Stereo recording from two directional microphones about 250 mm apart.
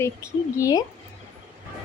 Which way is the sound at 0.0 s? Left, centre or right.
Centre.